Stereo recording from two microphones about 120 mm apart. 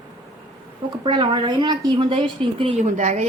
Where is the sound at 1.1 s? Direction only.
40° right (ahead or behind).